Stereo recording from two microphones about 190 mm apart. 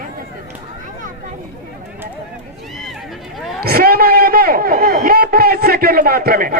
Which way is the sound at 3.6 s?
55° right (ahead or behind).